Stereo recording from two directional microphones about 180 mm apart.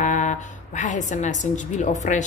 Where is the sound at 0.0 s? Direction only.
40° left (ahead or behind).